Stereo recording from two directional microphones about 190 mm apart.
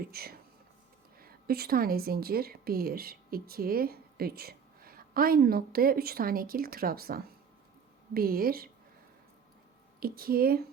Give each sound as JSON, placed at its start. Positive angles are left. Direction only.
{"t": 0.0, "sound": "a woman's voice", "side_deg": -55}
{"t": 10.0, "sound": "speech", "side_deg": -50}